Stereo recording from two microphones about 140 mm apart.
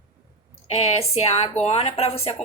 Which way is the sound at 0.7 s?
45° left (ahead or behind).